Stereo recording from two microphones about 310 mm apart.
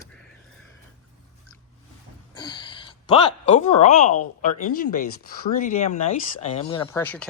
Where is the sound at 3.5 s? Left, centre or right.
Left.